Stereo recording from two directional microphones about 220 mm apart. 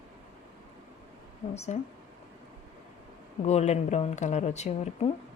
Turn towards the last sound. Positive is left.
turn(degrees=30)  # may be behind; listen again after turning